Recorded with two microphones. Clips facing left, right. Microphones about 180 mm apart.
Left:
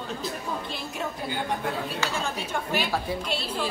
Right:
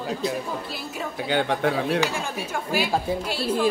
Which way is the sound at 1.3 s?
90° right.